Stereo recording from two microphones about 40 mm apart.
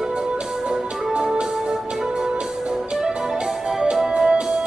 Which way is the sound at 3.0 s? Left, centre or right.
Centre.